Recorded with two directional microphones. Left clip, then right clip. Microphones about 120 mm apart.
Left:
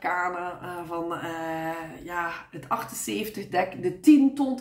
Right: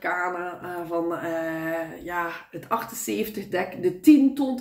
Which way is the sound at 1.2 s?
40° left (ahead or behind).